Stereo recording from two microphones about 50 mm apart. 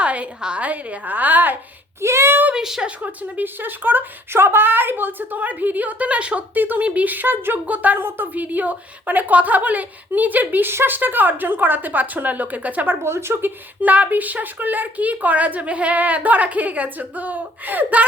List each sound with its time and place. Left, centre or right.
0.0 s a woman's voice: right
2.0 s speech: right
2.6 s a woman's voice: centre
2.8 s speech: right
3.4 s a woman's voice: right
7.9 s a woman's voice: right
8.4 s a woman's voice: right
10.5 s a woman's voice: right
12.9 s speech: right
13.8 s a woman's voice: right